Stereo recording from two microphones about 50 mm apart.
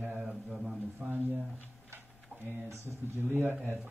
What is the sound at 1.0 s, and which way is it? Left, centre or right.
Speech, right.